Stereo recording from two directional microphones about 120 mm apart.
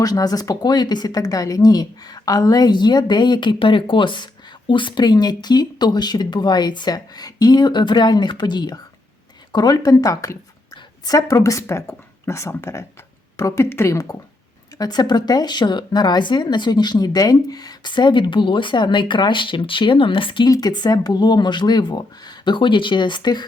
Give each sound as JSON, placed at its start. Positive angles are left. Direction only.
{"t": 0.0, "sound": "speech", "side_deg": 30}
{"t": 14.8, "sound": "speech", "side_deg": 35}
{"t": 20.5, "sound": "speech", "side_deg": 35}